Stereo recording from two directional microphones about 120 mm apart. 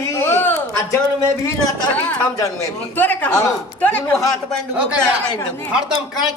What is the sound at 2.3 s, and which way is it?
Speech, 30° left (ahead or behind).